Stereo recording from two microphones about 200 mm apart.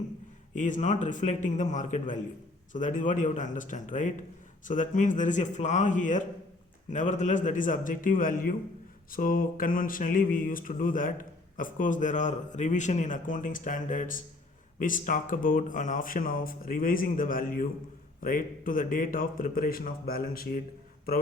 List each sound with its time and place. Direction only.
0.5 s speech: 40° left (ahead or behind)